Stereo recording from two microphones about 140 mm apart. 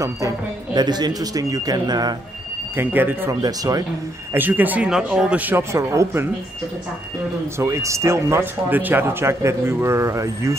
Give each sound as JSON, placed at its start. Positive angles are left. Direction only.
{"t": 0.7, "sound": "speech", "side_deg": -30}
{"t": 2.7, "sound": "speech", "side_deg": -15}
{"t": 3.4, "sound": "speech", "side_deg": -25}
{"t": 4.3, "sound": "speech", "side_deg": -15}
{"t": 7.5, "sound": "speech", "side_deg": -20}